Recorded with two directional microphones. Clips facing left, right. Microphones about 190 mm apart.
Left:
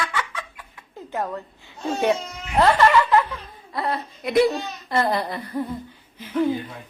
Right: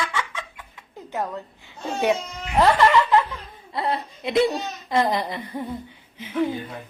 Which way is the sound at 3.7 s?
25° right (ahead or behind).